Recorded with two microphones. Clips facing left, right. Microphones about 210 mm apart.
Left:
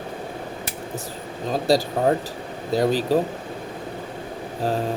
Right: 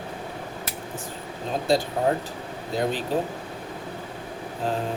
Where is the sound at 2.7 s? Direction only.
35° left (ahead or behind).